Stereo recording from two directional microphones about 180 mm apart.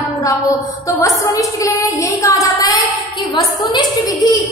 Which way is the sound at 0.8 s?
15° left (ahead or behind).